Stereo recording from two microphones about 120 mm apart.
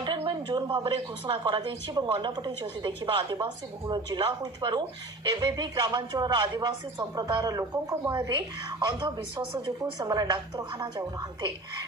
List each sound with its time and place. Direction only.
0.0 s a woman's voice: 40° right (ahead or behind)
8.8 s a woman's voice: 40° right (ahead or behind)